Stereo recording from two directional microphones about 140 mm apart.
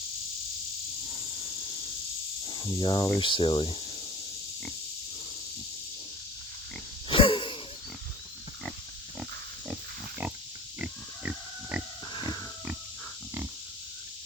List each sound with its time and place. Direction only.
1.0 s snake: 25° left (ahead or behind)
1.5 s snake: 35° left (ahead or behind)
2.7 s speech: 35° left (ahead or behind)
7.1 s a sound: 35° left (ahead or behind)
10.8 s pig: 10° right (ahead or behind)